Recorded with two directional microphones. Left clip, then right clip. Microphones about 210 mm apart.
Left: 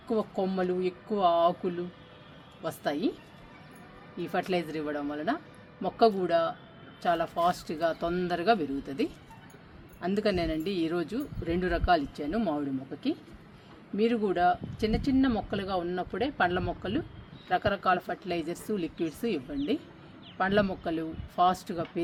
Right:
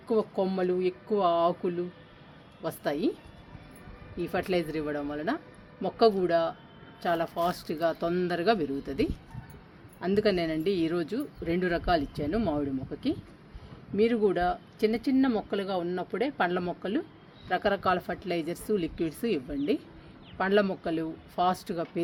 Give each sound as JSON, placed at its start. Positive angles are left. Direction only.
{"t": 0.1, "sound": "speech", "side_deg": -25}
{"t": 4.2, "sound": "speech", "side_deg": -25}